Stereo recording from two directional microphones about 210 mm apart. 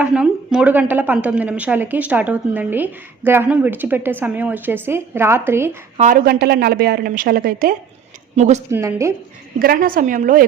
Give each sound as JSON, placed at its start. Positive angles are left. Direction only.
{"t": 0.0, "sound": "a woman's voice", "side_deg": -5}
{"t": 6.0, "sound": "a woman's voice", "side_deg": -40}
{"t": 8.7, "sound": "a woman's voice", "side_deg": -10}
{"t": 9.6, "sound": "a woman's voice", "side_deg": -45}